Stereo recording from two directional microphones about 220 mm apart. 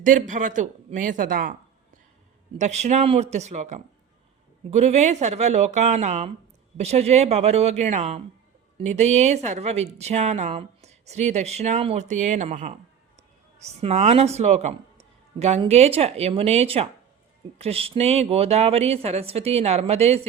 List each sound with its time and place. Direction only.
0.0 s a woman's voice: 35° right (ahead or behind)
2.6 s a woman's voice: 30° right (ahead or behind)